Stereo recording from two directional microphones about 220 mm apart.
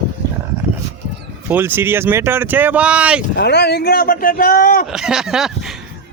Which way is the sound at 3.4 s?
50° left (ahead or behind).